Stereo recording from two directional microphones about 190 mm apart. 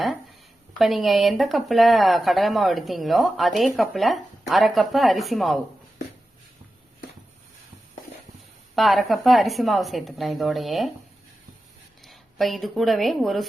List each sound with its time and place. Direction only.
0.8 s speech: centre (ahead or behind)
8.7 s speech: centre (ahead or behind)
12.0 s speech: centre (ahead or behind)